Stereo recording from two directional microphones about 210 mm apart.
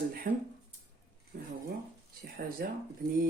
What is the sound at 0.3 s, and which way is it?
Speech, 45° right (ahead or behind).